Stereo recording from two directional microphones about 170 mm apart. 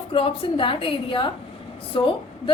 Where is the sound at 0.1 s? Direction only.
30° left (ahead or behind).